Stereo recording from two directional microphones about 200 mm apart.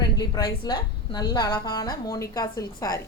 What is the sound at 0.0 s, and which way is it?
A woman's voice, 20° left (ahead or behind).